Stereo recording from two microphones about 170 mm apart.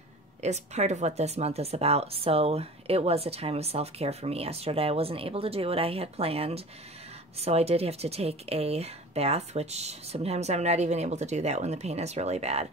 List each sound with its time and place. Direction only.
0.4 s speech: 40° right (ahead or behind)